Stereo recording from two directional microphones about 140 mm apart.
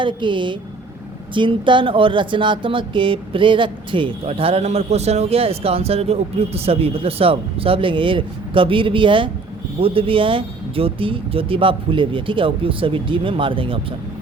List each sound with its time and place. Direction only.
0.0 s speech: 35° right (ahead or behind)